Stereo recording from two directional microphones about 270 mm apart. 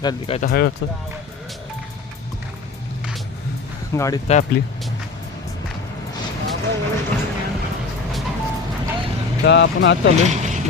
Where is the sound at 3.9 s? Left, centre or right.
Centre.